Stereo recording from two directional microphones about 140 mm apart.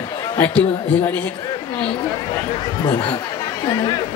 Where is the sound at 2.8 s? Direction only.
30° left (ahead or behind).